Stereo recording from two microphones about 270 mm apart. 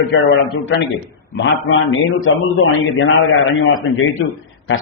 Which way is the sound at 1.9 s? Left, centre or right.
Left.